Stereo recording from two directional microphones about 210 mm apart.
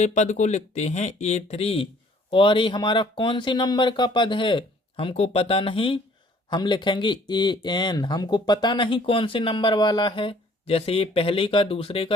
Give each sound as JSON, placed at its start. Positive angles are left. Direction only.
{"t": 0.0, "sound": "speech", "side_deg": 35}